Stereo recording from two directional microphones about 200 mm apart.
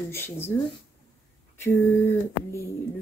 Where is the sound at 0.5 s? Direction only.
15° left (ahead or behind).